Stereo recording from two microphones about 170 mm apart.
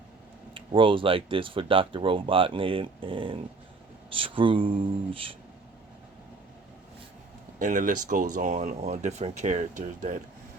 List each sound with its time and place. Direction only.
0.5 s speech: 30° right (ahead or behind)
7.6 s speech: 50° right (ahead or behind)